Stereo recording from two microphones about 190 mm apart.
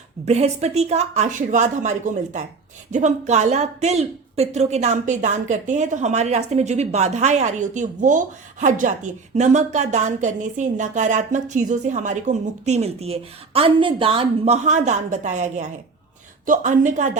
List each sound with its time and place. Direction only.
0.3 s a woman's voice: 35° right (ahead or behind)